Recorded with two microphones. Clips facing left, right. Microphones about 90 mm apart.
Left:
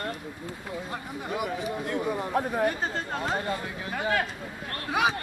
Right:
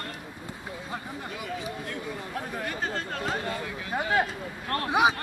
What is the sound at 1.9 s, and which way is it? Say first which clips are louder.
Speech: left 7 dB; 35° left (ahead or behind).